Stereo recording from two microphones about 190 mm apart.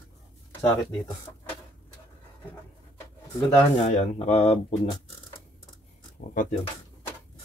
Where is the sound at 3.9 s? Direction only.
35° left (ahead or behind).